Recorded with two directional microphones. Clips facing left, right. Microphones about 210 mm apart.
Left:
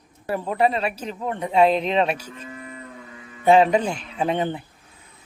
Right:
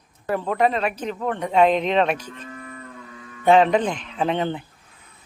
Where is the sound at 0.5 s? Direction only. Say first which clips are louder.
Even; 35° left (ahead or behind).